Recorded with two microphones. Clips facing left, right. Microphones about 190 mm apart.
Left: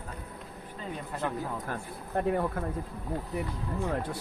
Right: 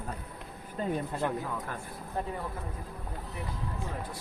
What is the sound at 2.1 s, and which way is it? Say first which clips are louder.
Speech: left 6 dB; 60° left (ahead or behind).